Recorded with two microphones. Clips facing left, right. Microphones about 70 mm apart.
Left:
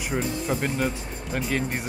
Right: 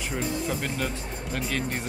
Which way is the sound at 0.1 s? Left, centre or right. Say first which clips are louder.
Left 3 dB; centre.